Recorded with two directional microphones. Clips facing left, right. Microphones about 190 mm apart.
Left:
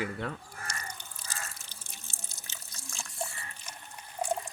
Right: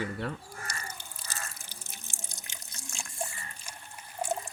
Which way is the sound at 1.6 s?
10° right (ahead or behind).